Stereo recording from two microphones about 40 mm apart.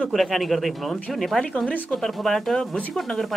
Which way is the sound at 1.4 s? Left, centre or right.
Left.